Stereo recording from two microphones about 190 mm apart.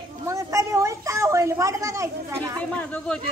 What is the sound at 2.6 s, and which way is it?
Speech, 5° left (ahead or behind).